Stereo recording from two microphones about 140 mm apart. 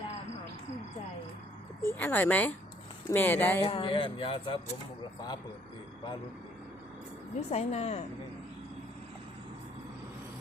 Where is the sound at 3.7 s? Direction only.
40° left (ahead or behind).